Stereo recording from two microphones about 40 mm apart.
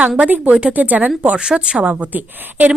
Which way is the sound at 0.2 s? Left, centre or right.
Right.